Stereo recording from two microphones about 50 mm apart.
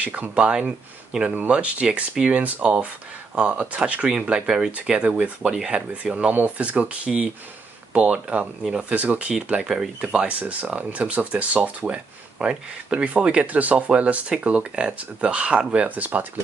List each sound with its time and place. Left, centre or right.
0.0 s speech: right
5.4 s speech: centre; by 9.3 s right
9.3 s speech: centre
10.0 s speech: right